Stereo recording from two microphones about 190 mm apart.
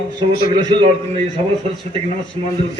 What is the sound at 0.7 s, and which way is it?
Speech, 25° right (ahead or behind).